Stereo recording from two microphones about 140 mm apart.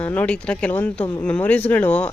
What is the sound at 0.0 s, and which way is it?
Speech, 10° left (ahead or behind).